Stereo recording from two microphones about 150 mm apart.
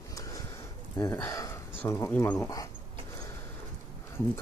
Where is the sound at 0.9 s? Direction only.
25° left (ahead or behind).